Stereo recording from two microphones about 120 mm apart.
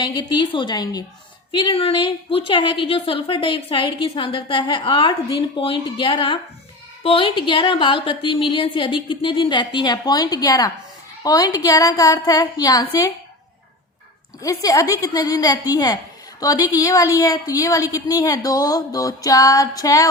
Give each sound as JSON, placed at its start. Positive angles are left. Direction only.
{"t": 0.0, "sound": "a woman's voice", "side_deg": 40}
{"t": 1.5, "sound": "a woman's voice", "side_deg": 45}
{"t": 14.4, "sound": "a woman's voice", "side_deg": 30}